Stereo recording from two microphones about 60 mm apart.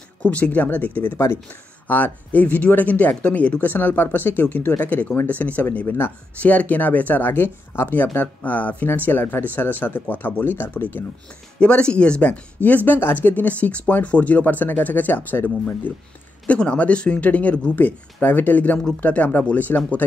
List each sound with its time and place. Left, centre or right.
0.2 s speech: left
5.9 s speech: left
6.4 s speech: left
7.9 s speech: left
11.6 s speech: centre
16.4 s speech: centre